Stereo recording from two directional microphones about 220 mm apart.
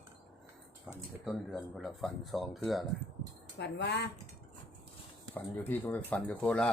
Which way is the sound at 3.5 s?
50° left (ahead or behind).